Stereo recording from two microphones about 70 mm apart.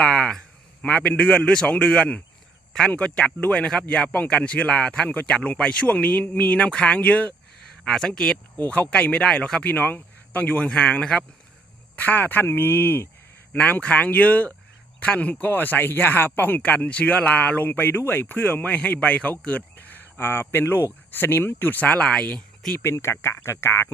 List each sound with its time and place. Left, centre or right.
0.0 s a man's voice: centre
7.9 s speech: centre
8.5 s speech: left
11.9 s speech: left
22.8 s speech: left